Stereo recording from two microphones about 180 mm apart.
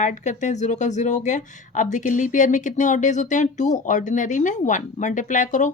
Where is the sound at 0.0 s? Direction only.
40° left (ahead or behind).